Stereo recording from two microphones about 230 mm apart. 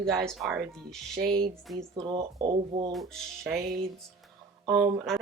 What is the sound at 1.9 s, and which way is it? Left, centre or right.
Speech, centre.